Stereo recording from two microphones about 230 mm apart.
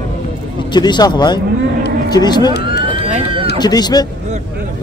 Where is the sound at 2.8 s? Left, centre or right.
Right.